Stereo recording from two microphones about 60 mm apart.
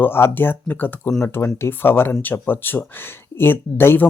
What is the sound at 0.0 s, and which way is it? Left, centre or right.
Speech, left.